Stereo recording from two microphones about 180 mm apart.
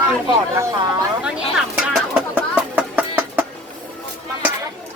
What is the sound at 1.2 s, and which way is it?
Speech, 5° right (ahead or behind).